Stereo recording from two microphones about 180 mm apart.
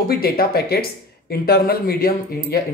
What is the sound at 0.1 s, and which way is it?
Speech, 55° left (ahead or behind).